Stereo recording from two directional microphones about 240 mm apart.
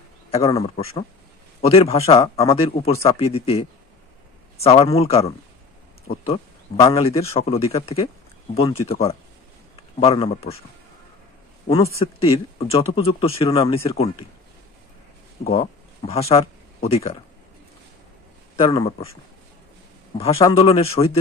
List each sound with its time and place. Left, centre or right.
0.3 s a man's voice: left
6.2 s a man's voice: left
9.9 s a man's voice: left
12.0 s a man's voice: left
15.4 s speech: left
18.6 s a man's voice: left
20.2 s a man's voice: left